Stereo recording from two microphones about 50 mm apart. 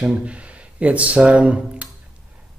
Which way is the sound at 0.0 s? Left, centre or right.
Centre.